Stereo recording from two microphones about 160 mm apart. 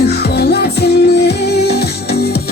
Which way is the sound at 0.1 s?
90° left.